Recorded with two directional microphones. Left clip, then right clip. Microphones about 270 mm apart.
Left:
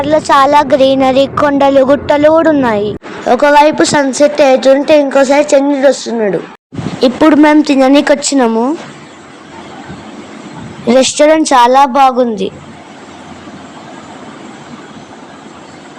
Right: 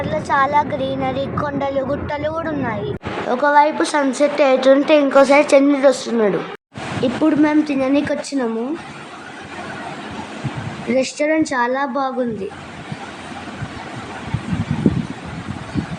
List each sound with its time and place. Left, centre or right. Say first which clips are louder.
0.0 s speech: left 10 dB; left
3.2 s a woman's voice: left 8 dB; left
7.0 s speech: left 10 dB; left
10.9 s a woman's voice: left 10 dB; left